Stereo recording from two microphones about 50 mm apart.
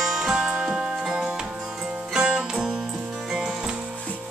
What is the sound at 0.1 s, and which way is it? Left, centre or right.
Music, centre.